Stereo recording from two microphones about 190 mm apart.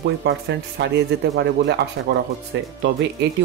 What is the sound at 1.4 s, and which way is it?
Speech, 65° right (ahead or behind).